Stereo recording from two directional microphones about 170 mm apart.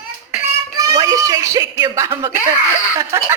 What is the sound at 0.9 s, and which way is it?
A woman's voice, 20° right (ahead or behind).